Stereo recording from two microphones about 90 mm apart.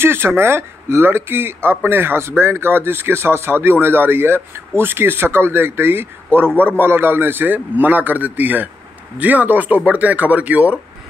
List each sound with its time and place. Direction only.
0.0 s speech: 25° right (ahead or behind)